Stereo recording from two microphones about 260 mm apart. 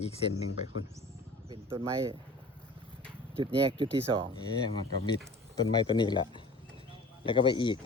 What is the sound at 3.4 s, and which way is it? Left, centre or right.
Speech, centre.